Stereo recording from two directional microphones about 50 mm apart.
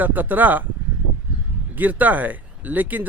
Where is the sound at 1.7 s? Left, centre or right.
Right.